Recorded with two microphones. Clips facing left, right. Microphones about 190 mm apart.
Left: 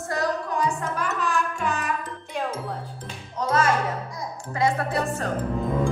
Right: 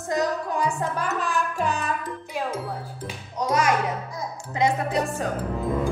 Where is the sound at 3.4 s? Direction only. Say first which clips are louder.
Even; 15° right (ahead or behind).